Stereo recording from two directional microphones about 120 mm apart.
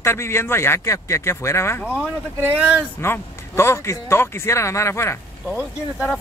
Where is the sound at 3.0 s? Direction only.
20° left (ahead or behind).